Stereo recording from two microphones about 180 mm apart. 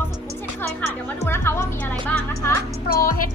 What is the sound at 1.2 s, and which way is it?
Speech, 15° left (ahead or behind).